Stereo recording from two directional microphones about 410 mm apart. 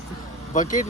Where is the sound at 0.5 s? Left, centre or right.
Centre.